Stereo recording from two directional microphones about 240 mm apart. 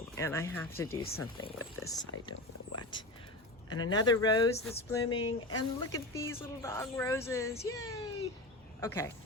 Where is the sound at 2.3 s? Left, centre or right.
Left.